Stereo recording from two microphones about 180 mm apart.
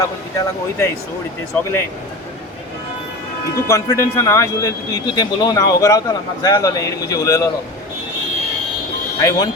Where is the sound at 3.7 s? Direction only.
15° left (ahead or behind).